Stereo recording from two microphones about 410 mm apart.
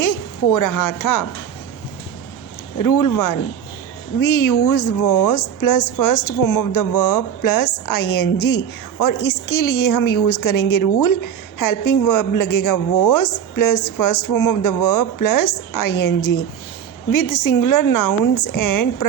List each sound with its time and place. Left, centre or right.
0.0 s a woman's voice: left
2.7 s a woman's voice: left